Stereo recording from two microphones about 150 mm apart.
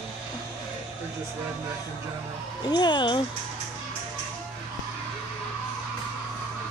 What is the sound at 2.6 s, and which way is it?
Speech, 30° left (ahead or behind).